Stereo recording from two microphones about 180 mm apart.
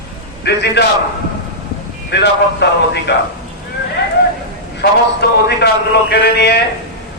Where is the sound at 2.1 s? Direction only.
70° left (ahead or behind).